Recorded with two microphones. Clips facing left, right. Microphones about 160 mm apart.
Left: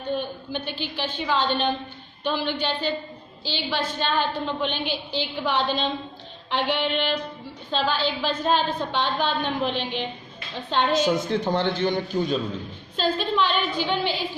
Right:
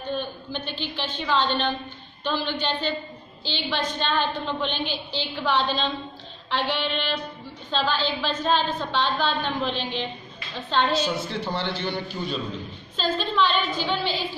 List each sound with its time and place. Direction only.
0.1 s a woman's voice: 15° left (ahead or behind)
10.9 s a man's voice: 45° left (ahead or behind)
12.9 s a woman's voice: 10° left (ahead or behind)